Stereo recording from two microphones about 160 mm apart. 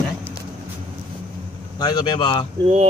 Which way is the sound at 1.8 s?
25° left (ahead or behind).